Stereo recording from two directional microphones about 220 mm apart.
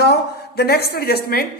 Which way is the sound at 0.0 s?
45° left (ahead or behind).